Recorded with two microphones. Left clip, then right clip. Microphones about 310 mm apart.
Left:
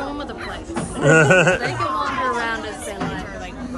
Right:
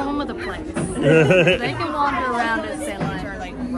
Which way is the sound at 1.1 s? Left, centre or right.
Centre.